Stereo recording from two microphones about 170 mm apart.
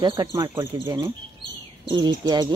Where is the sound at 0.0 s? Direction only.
25° right (ahead or behind).